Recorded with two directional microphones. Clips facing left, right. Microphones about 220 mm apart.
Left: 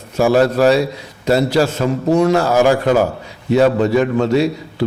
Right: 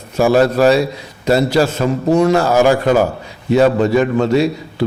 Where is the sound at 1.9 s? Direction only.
20° right (ahead or behind).